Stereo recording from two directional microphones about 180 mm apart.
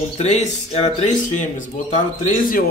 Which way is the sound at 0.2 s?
40° left (ahead or behind).